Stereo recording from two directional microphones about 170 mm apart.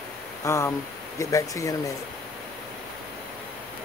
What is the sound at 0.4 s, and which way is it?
Speech, 20° left (ahead or behind).